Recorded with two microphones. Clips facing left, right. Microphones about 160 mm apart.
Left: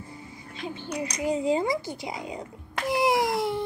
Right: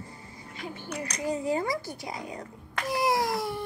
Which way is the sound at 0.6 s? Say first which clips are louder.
Left 4 dB; 20° left (ahead or behind).